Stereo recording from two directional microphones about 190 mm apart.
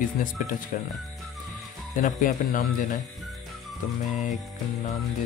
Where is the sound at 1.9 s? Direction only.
45° left (ahead or behind).